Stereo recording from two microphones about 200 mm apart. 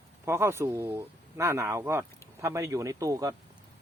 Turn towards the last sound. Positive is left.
turn(degrees=-15)  # may be behind; listen again after turning